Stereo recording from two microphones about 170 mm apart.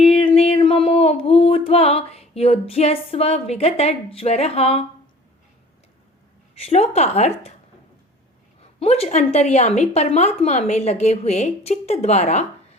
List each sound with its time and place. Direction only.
0.0 s a sound: 35° left (ahead or behind)
6.6 s a woman's voice: 35° left (ahead or behind)
8.6 s a woman's voice: 35° left (ahead or behind)